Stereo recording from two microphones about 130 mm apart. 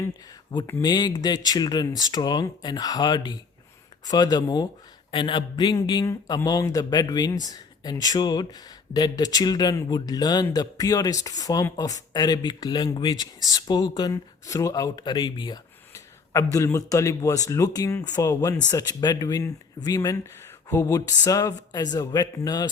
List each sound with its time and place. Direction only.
0.7 s speech: 30° left (ahead or behind)
16.3 s speech: 25° left (ahead or behind)